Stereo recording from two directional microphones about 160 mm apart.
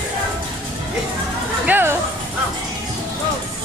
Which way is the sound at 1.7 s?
15° right (ahead or behind).